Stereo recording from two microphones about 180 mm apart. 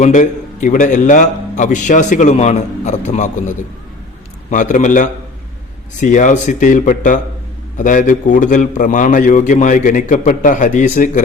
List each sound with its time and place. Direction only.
0.0 s a man's voice: 45° left (ahead or behind)
4.4 s a man's voice: 45° left (ahead or behind)